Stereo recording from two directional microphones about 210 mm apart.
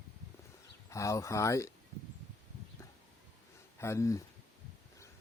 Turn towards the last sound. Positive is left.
turn(degrees=15)  # may be behind; listen again after turning